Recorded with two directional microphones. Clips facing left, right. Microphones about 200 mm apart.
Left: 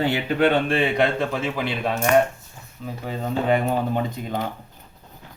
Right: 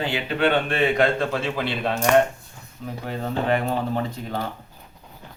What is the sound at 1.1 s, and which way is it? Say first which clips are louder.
Speech: even; 15° left (ahead or behind).